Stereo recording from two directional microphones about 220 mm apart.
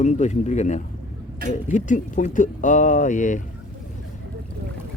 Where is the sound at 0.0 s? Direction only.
30° left (ahead or behind).